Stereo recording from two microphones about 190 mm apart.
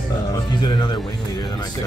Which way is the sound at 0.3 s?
25° left (ahead or behind).